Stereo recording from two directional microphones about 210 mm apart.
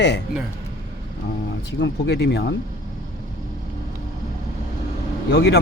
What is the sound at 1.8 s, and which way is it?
Speech, 55° left (ahead or behind).